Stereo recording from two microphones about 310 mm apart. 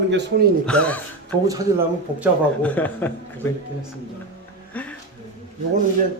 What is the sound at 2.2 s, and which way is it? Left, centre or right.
A man's voice, centre.